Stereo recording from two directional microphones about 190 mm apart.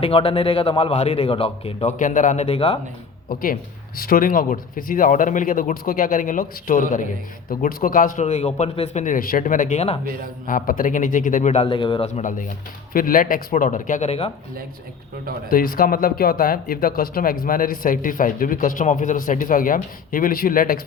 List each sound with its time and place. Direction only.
0.0 s a man's voice: 30° left (ahead or behind)
3.4 s a man's voice: 50° left (ahead or behind); by 10.0 s 35° left (ahead or behind)
10.4 s speech: 45° left (ahead or behind)
15.4 s speech: 50° left (ahead or behind)